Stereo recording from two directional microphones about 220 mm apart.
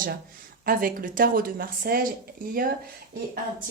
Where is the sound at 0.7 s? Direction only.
40° right (ahead or behind).